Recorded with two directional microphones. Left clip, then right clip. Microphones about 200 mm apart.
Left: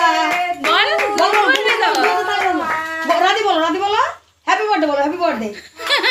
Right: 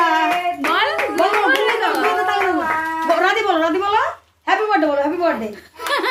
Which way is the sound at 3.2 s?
30° left (ahead or behind).